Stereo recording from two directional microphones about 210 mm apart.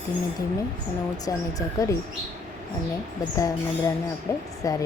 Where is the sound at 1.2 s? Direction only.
15° left (ahead or behind).